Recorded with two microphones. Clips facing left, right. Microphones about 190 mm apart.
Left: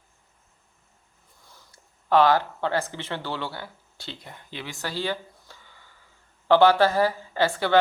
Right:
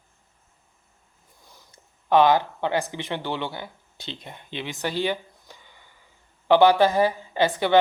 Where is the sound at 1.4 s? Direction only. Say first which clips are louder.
Right 1 dB; 20° right (ahead or behind).